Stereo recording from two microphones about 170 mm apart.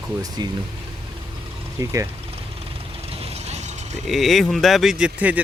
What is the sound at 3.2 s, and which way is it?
Mechanisms, 40° right (ahead or behind).